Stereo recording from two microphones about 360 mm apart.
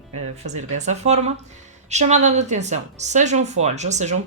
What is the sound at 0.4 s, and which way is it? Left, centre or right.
A woman's voice, centre.